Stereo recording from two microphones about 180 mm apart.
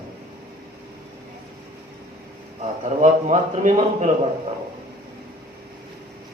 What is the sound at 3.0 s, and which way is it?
A man's voice, 40° right (ahead or behind).